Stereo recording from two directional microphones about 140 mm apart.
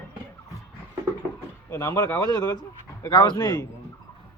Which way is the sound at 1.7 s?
20° left (ahead or behind).